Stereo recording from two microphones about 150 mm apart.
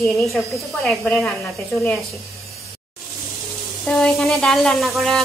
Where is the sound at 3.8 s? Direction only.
5° left (ahead or behind).